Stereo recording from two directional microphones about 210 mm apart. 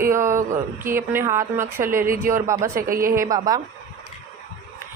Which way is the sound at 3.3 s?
20° right (ahead or behind).